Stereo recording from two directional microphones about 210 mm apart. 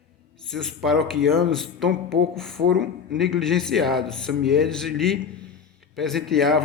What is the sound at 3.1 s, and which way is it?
A man's voice, centre (ahead or behind).